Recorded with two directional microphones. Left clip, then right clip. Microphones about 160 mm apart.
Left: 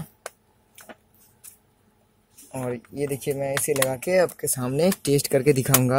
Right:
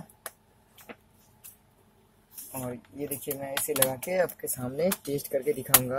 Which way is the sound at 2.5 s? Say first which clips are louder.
Left 7 dB; 75° left (ahead or behind).